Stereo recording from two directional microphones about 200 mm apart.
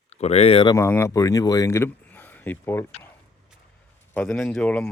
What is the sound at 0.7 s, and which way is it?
Speech, 15° left (ahead or behind).